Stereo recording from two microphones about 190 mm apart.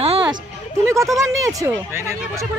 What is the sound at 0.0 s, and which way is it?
Music, 30° right (ahead or behind).